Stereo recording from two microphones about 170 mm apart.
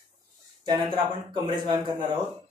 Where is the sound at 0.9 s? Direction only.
30° right (ahead or behind).